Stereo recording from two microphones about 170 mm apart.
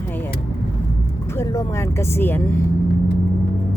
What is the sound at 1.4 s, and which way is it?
Speech, 15° left (ahead or behind).